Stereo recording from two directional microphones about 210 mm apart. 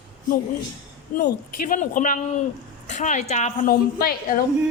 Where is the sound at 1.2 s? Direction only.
45° left (ahead or behind).